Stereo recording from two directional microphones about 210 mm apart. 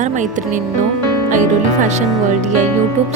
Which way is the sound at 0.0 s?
35° right (ahead or behind).